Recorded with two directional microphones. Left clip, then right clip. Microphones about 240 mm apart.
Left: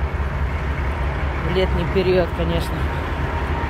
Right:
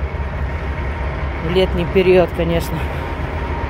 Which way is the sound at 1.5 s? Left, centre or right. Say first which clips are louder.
Right 5 dB; right.